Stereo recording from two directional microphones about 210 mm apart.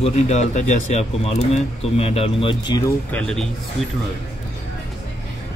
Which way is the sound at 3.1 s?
5° left (ahead or behind).